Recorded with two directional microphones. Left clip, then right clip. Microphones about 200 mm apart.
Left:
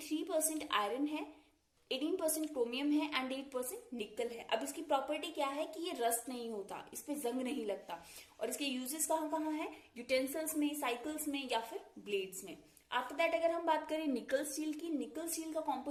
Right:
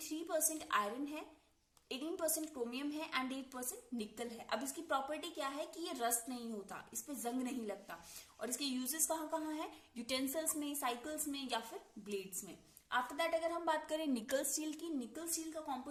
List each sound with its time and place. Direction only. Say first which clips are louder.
0.0 s a woman's voice: left 3 dB; 15° right (ahead or behind)
12.9 s a woman's voice: left 2 dB; 25° right (ahead or behind)